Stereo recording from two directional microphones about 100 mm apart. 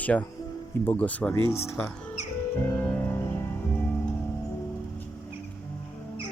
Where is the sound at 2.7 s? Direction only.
20° left (ahead or behind).